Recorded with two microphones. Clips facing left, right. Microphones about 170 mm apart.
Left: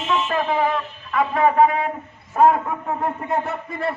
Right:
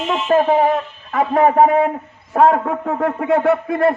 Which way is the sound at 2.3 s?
75° right (ahead or behind).